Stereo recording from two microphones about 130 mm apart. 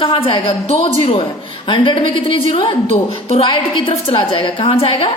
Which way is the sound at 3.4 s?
45° left (ahead or behind).